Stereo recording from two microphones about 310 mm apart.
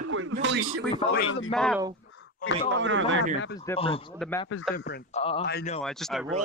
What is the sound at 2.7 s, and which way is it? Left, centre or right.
Speech, right.